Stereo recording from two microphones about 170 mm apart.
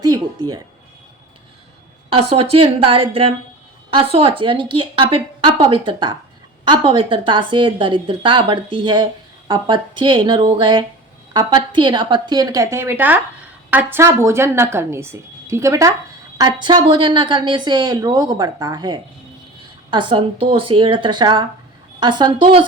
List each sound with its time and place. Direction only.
0.0 s speech: 20° right (ahead or behind)
2.0 s a woman's voice: 35° right (ahead or behind)